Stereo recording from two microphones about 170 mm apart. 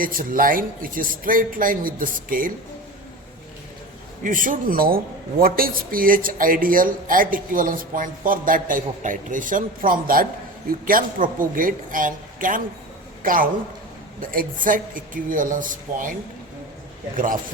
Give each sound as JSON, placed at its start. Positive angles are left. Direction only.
{"t": 0.0, "sound": "speech", "side_deg": -55}
{"t": 4.2, "sound": "a man's voice", "side_deg": -50}